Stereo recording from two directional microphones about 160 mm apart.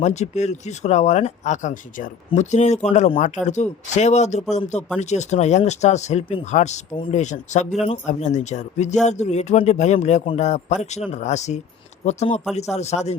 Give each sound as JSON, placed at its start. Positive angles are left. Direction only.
{"t": 0.0, "sound": "speech", "side_deg": 45}